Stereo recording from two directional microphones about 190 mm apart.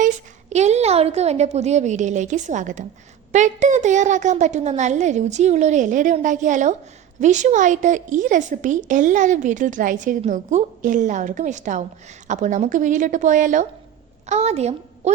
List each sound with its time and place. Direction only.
0.5 s a woman's voice: 35° right (ahead or behind)